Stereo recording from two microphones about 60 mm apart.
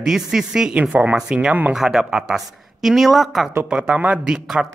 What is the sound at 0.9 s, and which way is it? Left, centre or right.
A woman's voice, right.